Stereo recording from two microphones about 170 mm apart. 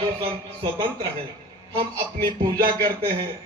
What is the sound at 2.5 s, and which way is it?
Speech, 65° right (ahead or behind).